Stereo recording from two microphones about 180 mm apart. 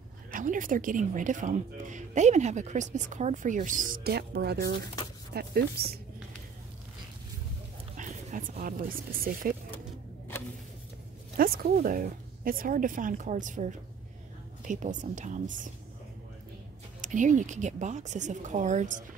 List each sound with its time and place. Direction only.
0.3 s speech: 50° right (ahead or behind)
7.9 s speech: 45° right (ahead or behind)
11.3 s speech: 55° right (ahead or behind)
17.0 s speech: 45° right (ahead or behind)